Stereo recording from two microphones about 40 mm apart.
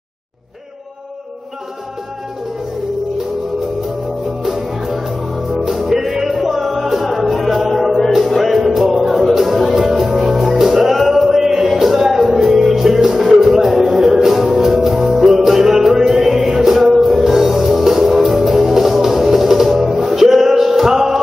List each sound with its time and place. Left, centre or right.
4.4 s music: centre